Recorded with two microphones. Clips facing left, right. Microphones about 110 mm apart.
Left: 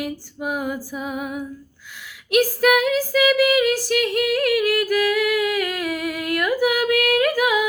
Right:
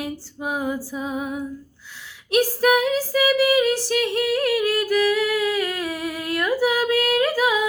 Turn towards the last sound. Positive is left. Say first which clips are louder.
# left 1 dB
turn(degrees=-30)  # may be behind; listen again after turning